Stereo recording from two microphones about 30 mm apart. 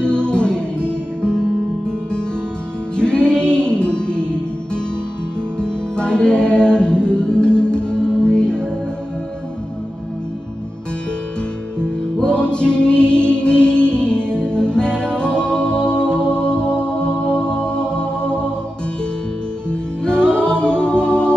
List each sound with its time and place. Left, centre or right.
0.0 s music: left
3.0 s music: left
5.6 s music: left
11.8 s music: left
19.7 s music: left